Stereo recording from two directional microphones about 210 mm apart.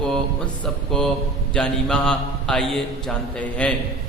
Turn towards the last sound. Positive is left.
turn(degrees=5)  # may be behind; listen again after turning